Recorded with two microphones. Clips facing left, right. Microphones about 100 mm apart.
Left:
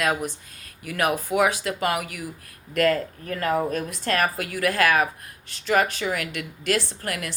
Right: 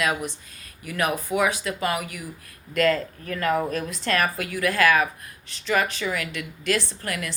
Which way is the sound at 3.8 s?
50° left (ahead or behind).